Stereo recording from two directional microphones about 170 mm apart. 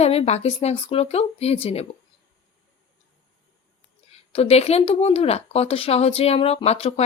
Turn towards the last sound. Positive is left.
turn(degrees=35)  # may be behind; listen again after turning